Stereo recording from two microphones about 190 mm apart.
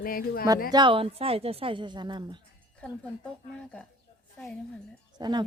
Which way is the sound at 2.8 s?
5° left (ahead or behind).